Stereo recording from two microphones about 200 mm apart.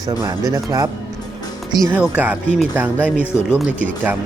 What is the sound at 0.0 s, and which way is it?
Speech, 15° right (ahead or behind).